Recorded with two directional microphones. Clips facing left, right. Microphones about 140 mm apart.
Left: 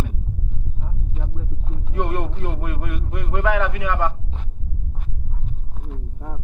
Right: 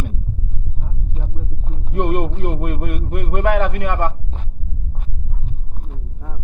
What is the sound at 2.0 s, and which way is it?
A man's voice, 60° right (ahead or behind).